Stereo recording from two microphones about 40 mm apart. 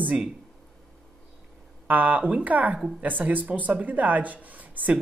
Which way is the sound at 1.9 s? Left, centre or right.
Right.